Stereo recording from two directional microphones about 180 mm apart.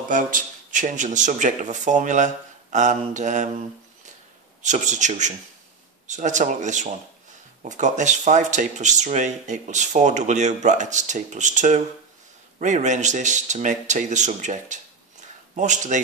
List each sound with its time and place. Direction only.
0.1 s a man's voice: 45° right (ahead or behind)